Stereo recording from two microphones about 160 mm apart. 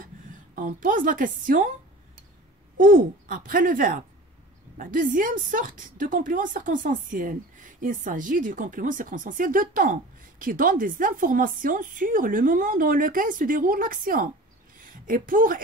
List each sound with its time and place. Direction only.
0.6 s speech: 60° right (ahead or behind)
2.8 s speech: 60° right (ahead or behind)